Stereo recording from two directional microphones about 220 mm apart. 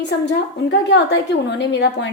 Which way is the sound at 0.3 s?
55° left (ahead or behind).